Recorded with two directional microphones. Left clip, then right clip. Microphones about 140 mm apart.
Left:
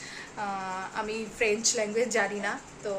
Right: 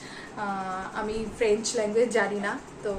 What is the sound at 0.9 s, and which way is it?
A woman's voice, 20° left (ahead or behind).